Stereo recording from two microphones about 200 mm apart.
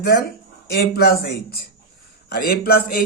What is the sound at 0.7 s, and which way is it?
Speech, 55° left (ahead or behind).